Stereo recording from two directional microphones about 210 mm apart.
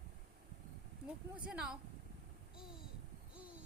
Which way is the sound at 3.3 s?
5° right (ahead or behind).